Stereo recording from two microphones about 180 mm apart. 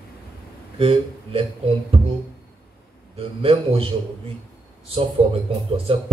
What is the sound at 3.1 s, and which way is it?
Speech, 30° right (ahead or behind).